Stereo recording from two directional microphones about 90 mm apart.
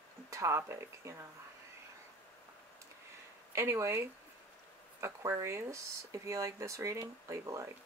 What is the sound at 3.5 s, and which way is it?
Speech, 35° right (ahead or behind).